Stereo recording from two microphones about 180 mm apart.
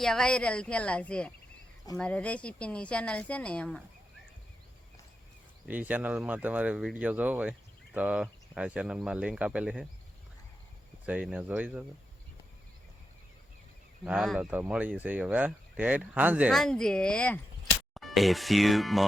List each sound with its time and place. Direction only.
0.0 s speech: 5° left (ahead or behind)
5.6 s speech: 10° right (ahead or behind)
11.0 s speech: 5° right (ahead or behind)
14.0 s speech: centre (ahead or behind)